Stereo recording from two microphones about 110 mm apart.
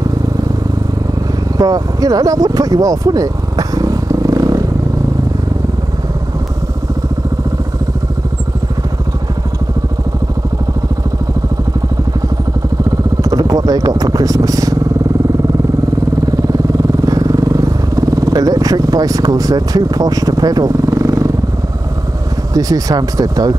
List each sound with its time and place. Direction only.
1.6 s a sound: 35° right (ahead or behind)
13.2 s speech: 30° right (ahead or behind)
17.0 s vehicle: 35° right (ahead or behind)
22.5 s speech: 35° right (ahead or behind)